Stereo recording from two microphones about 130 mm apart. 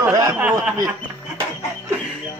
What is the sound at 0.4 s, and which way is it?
Snicker, 5° right (ahead or behind).